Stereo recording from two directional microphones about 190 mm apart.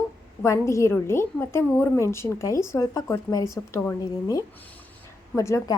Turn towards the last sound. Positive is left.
turn(degrees=15)  # may be behind; listen again after turning